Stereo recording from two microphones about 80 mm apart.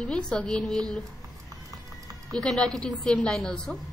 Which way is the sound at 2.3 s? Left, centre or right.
Centre.